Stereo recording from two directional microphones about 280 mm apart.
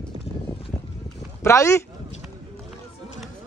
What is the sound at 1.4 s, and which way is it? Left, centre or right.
Speech, centre.